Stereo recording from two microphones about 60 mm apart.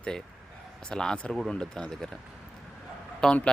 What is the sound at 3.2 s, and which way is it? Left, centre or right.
Speech, centre.